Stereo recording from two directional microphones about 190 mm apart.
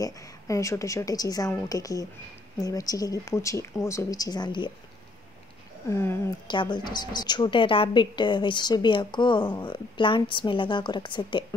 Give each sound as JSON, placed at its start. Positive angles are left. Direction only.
{"t": 0.0, "sound": "a woman's voice", "side_deg": 15}
{"t": 5.9, "sound": "a woman's voice", "side_deg": 10}
{"t": 6.4, "sound": "a woman's voice", "side_deg": 25}